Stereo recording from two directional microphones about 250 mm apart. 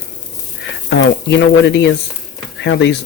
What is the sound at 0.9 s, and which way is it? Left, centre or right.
Speech, left.